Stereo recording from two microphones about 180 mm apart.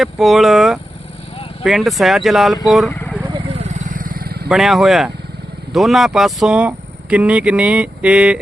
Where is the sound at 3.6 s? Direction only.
40° right (ahead or behind).